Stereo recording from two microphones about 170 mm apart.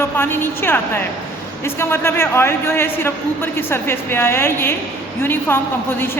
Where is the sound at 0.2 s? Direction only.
15° left (ahead or behind).